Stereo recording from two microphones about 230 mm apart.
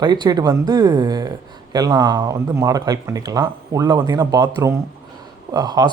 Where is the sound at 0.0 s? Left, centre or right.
Centre.